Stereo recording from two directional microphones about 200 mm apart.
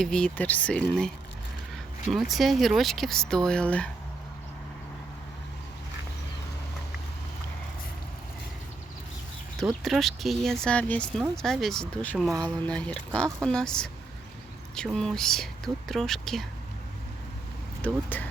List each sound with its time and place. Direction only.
0.0 s speech: 5° left (ahead or behind)
9.8 s speech: centre (ahead or behind)
17.8 s speech: 10° left (ahead or behind)